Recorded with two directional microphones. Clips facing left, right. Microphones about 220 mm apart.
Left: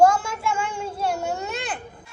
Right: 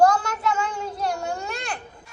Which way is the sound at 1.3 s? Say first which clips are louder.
Left 2 dB; 5° left (ahead or behind).